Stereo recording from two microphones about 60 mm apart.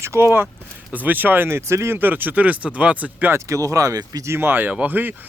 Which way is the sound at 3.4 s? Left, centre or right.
Right.